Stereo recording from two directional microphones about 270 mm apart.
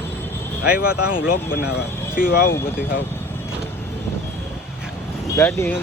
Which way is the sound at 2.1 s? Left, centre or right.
Left.